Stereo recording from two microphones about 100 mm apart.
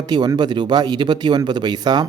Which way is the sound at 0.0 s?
45° right (ahead or behind).